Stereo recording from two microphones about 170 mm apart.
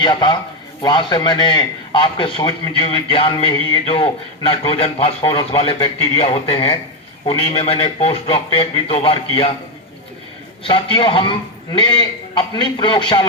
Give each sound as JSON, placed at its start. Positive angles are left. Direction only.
{"t": 0.0, "sound": "a man's voice", "side_deg": 25}
{"t": 10.6, "sound": "a man's voice", "side_deg": 30}